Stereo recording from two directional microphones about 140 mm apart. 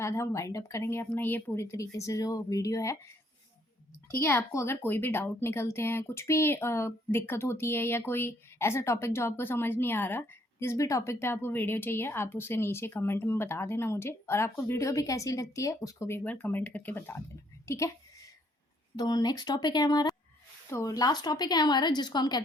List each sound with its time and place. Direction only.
0.0 s speech: 20° left (ahead or behind)
4.1 s a woman's voice: 20° left (ahead or behind)
18.9 s speech: 30° left (ahead or behind)